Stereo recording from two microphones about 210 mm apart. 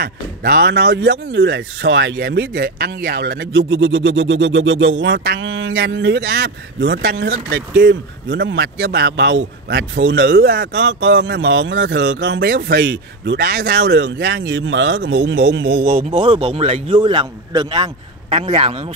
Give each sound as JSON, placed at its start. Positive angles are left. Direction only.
{"t": 0.0, "sound": "speech", "side_deg": -50}
{"t": 15.8, "sound": "a man's voice", "side_deg": -30}